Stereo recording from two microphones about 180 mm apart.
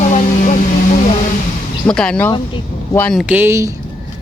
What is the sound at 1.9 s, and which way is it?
Speech, 5° left (ahead or behind).